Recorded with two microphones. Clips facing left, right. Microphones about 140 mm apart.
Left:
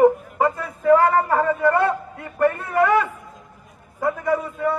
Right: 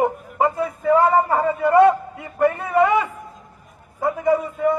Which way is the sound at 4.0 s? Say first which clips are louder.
Right 2 dB; 15° right (ahead or behind).